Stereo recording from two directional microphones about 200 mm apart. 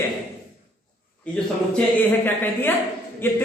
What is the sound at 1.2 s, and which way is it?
A man's voice, 5° left (ahead or behind).